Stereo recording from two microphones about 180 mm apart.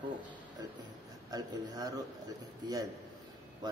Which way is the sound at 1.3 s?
20° right (ahead or behind).